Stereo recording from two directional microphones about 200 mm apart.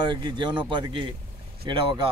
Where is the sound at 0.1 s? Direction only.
20° right (ahead or behind).